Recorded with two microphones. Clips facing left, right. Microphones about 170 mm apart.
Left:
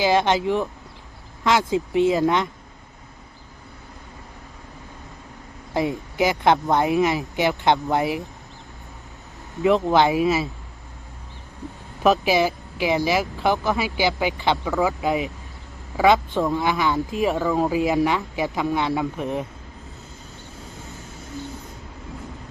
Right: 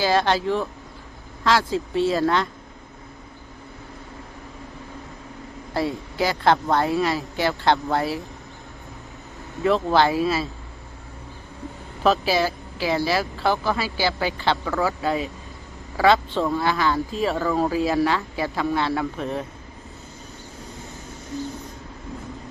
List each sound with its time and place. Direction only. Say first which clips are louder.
0.0 s speech: left 1 dB; 15° left (ahead or behind)
5.7 s speech: left 2 dB; 15° left (ahead or behind)
9.6 s speech: left 2 dB; 15° left (ahead or behind)
12.0 s speech: left 2 dB; 15° left (ahead or behind)